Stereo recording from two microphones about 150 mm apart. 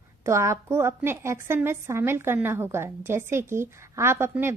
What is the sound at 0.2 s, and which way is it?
A woman's voice, 20° right (ahead or behind).